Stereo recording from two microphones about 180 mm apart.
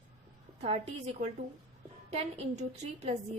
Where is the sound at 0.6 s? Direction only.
35° right (ahead or behind).